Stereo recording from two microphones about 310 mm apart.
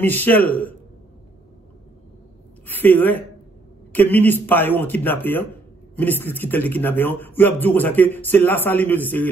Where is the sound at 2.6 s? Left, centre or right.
Centre.